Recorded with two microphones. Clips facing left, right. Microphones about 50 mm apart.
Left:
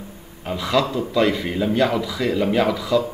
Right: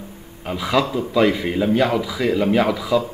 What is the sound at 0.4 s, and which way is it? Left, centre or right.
Speech, centre.